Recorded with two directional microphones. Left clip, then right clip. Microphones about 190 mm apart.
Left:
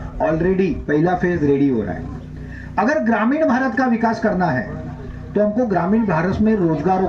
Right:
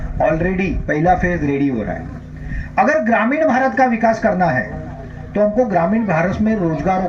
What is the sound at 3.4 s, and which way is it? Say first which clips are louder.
Speech: right 4 dB; 55° right (ahead or behind).